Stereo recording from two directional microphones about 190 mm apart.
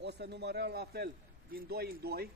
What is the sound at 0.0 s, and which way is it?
A man's voice, 60° right (ahead or behind).